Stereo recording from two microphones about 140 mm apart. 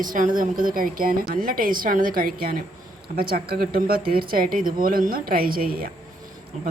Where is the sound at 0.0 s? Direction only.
75° right (ahead or behind).